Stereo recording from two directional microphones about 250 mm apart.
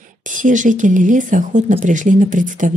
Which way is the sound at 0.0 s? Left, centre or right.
Right.